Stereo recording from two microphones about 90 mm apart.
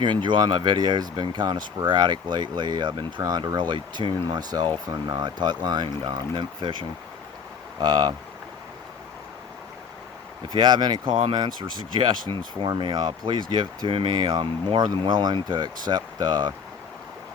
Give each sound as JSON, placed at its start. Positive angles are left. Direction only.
{"t": 0.0, "sound": "speech", "side_deg": -60}
{"t": 7.8, "sound": "speech", "side_deg": -50}
{"t": 10.6, "sound": "speech", "side_deg": -55}
{"t": 14.2, "sound": "speech", "side_deg": -65}